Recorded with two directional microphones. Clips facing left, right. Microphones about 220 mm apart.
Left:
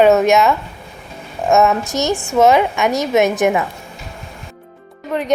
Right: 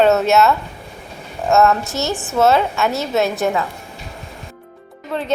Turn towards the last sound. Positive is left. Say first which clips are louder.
# left 3 dB
turn(degrees=15)  # may be behind; listen again after turning